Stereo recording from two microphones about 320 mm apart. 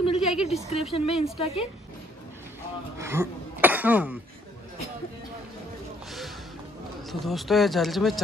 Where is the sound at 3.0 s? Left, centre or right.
Centre.